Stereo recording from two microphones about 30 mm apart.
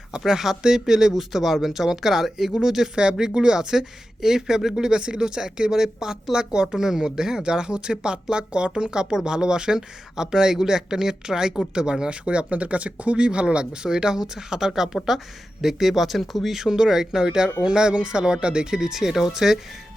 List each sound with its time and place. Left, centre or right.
0.3 s speech: centre
2.9 s speech: right
12.5 s speech: right
13.1 s speech: right
13.9 s speech: right; by 16.6 s centre
16.6 s speech: right
18.7 s speech: centre